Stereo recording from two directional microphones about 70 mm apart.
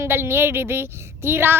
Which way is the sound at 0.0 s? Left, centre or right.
Right.